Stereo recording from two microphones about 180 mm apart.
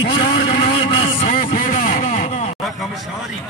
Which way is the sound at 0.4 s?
30° left (ahead or behind).